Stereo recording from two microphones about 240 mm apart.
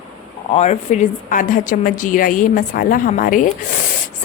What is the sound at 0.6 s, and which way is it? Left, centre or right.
A woman's voice, left.